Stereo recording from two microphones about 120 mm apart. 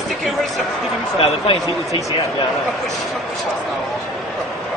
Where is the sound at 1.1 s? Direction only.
50° left (ahead or behind).